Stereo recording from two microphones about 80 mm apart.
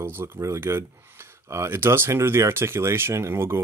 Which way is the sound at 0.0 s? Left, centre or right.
Right.